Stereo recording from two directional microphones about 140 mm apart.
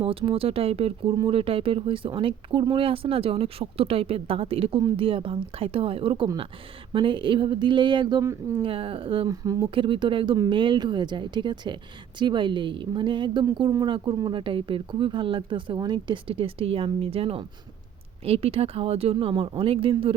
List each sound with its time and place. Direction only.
0.0 s speech: 40° right (ahead or behind)
8.2 s speech: 20° right (ahead or behind)
8.6 s speech: 40° right (ahead or behind)
9.3 s speech: 25° right (ahead or behind)
9.6 s speech: 35° right (ahead or behind)